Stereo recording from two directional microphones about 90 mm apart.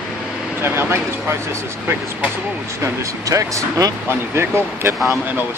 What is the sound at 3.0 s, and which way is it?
Speech, 35° right (ahead or behind).